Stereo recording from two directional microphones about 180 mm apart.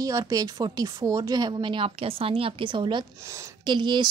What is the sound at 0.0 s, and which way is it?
Speech, 20° right (ahead or behind).